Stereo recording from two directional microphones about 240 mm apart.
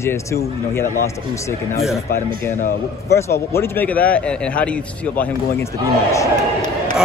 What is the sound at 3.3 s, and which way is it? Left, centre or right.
A man's voice, centre.